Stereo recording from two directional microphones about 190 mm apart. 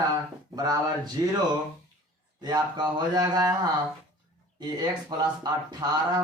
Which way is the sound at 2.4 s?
20° right (ahead or behind).